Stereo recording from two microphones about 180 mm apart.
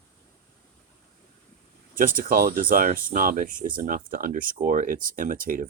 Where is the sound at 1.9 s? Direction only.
50° right (ahead or behind).